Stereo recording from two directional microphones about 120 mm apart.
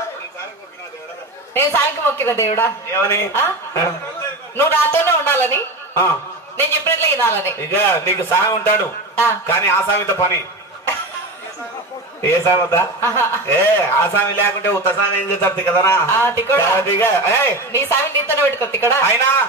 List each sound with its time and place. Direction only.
1.5 s a man's voice: 20° left (ahead or behind)
12.2 s a man's voice: 25° left (ahead or behind)